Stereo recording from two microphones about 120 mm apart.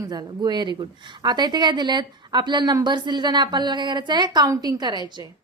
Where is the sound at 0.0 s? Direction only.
35° right (ahead or behind).